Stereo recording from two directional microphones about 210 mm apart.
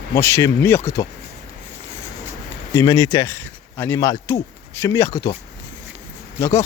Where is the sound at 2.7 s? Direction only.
15° left (ahead or behind).